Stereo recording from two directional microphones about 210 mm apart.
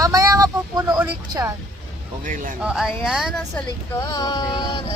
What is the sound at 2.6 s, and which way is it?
Speech, 5° right (ahead or behind).